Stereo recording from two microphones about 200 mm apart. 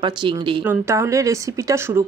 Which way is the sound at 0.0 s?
25° right (ahead or behind).